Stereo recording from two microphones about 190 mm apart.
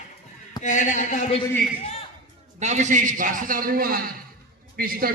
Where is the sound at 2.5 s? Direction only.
40° right (ahead or behind).